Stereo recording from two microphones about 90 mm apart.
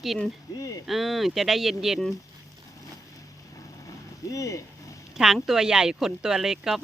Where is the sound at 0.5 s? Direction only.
40° left (ahead or behind).